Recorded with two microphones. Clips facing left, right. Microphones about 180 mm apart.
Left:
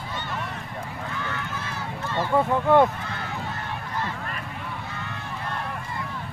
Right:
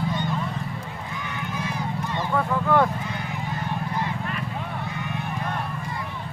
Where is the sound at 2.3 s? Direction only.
20° left (ahead or behind).